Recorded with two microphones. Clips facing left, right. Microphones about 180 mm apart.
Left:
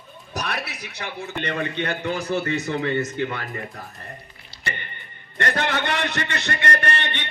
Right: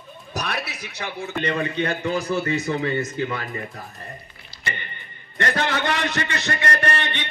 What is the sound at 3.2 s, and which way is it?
Speech, 35° right (ahead or behind).